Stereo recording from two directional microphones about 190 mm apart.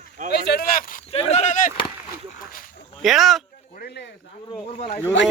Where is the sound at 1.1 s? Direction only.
35° left (ahead or behind).